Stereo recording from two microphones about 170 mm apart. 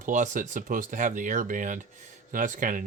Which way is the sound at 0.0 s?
50° right (ahead or behind).